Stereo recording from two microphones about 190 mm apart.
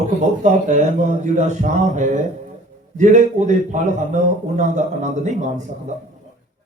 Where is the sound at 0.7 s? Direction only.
40° right (ahead or behind).